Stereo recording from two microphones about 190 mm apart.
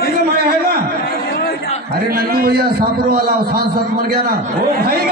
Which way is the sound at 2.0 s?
50° right (ahead or behind).